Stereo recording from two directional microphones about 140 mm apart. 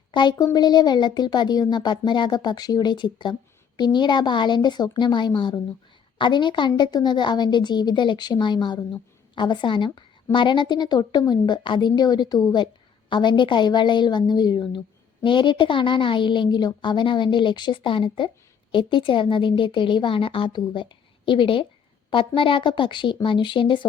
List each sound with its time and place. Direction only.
0.1 s a woman's voice: 30° left (ahead or behind)